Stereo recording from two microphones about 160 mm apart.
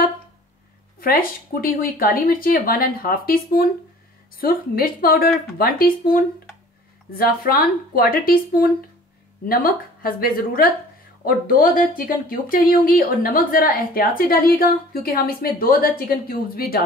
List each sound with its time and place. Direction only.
0.9 s speech: 65° left (ahead or behind)